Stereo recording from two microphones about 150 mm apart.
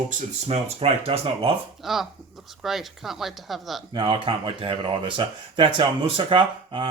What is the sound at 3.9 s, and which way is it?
Speech, 35° right (ahead or behind).